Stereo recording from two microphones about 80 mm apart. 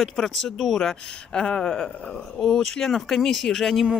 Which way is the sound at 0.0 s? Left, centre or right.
Centre.